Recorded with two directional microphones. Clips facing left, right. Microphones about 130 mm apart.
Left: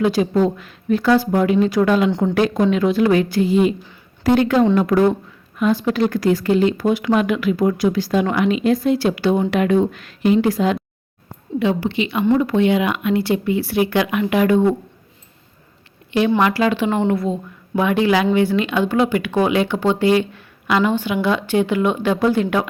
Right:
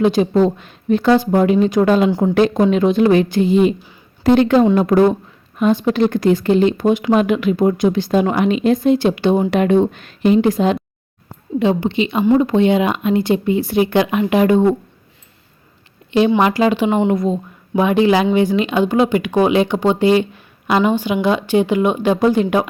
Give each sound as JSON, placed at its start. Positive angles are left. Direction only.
{"t": 0.0, "sound": "a woman's voice", "side_deg": -25}
{"t": 16.4, "sound": "speech", "side_deg": -20}